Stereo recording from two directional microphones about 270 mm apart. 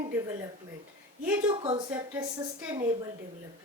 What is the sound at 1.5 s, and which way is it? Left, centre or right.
Speech, centre.